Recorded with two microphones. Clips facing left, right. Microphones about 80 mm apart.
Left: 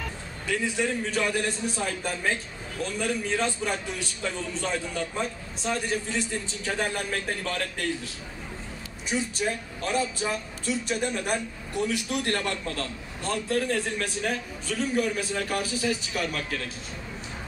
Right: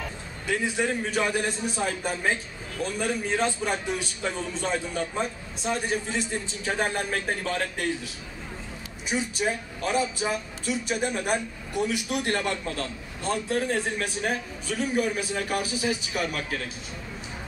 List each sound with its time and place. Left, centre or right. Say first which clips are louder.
0.5 s a man's voice: right 1 dB; right
9.1 s a man's voice: right 1 dB; centre